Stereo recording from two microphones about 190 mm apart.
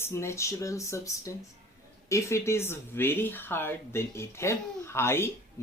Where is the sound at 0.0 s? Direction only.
15° left (ahead or behind).